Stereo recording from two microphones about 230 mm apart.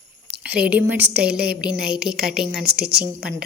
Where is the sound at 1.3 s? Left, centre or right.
Right.